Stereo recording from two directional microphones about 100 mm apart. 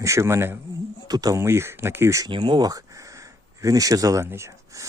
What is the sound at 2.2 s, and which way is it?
Speech, 55° right (ahead or behind).